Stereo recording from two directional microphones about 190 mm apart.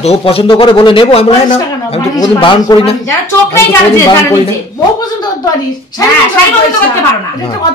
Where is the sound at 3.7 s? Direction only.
15° left (ahead or behind).